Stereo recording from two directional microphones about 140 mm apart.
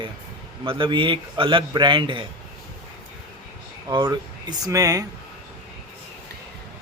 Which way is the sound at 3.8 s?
30° right (ahead or behind).